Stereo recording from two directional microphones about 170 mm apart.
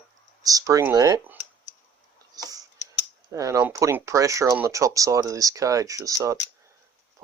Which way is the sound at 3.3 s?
20° right (ahead or behind).